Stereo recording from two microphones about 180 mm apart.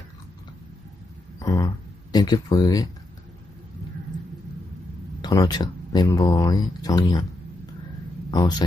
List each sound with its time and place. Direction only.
1.4 s a sound: 20° left (ahead or behind)
2.1 s speech: 20° left (ahead or behind)
5.2 s speech: 20° left (ahead or behind)
8.3 s speech: 25° left (ahead or behind)